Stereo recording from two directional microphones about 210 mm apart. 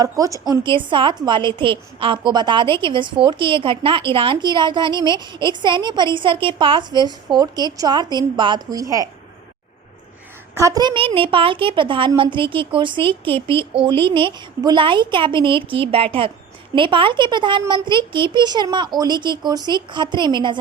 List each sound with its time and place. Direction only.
0.0 s a woman's voice: 15° right (ahead or behind)
10.5 s a woman's voice: 15° right (ahead or behind)